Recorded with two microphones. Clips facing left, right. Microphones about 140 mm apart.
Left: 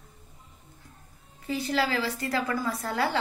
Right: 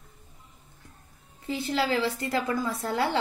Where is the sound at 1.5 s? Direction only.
25° right (ahead or behind).